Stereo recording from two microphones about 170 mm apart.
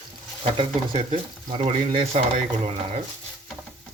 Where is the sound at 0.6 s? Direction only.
35° right (ahead or behind).